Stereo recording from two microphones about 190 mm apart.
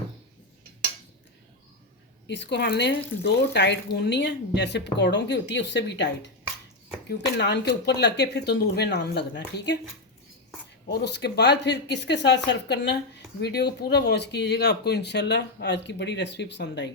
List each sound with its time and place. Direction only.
2.2 s speech: 65° left (ahead or behind)
10.9 s speech: 60° left (ahead or behind)